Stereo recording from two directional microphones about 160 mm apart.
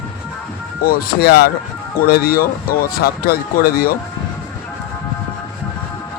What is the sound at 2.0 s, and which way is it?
Speech, 75° left (ahead or behind).